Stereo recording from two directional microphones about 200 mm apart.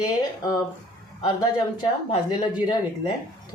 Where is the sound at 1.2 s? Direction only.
20° left (ahead or behind).